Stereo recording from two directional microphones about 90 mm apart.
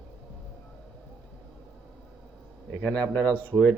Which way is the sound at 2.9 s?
40° right (ahead or behind).